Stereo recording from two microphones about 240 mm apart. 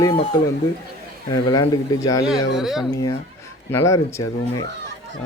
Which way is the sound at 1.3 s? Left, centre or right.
Centre.